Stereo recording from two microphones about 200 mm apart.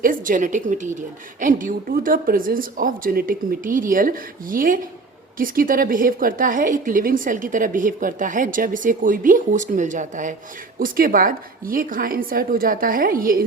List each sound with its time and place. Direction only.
0.0 s a woman's voice: 45° right (ahead or behind)